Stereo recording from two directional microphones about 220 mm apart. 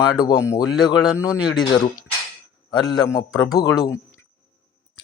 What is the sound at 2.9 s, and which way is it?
Speech, 15° left (ahead or behind).